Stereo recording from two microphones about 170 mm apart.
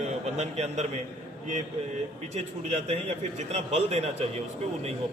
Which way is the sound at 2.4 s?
40° right (ahead or behind).